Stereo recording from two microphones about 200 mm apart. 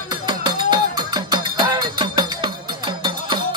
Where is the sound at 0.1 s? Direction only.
20° right (ahead or behind).